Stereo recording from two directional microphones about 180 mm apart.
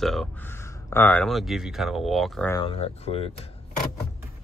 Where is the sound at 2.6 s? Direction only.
30° left (ahead or behind).